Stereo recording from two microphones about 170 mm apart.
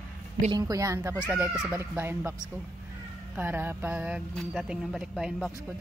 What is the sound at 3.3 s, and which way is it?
Speech, 10° right (ahead or behind).